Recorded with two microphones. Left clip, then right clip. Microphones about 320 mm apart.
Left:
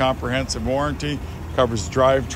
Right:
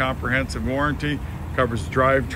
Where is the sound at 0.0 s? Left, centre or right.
Centre.